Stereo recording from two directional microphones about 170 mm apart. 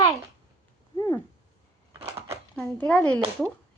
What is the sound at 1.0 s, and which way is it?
Cat, 20° left (ahead or behind).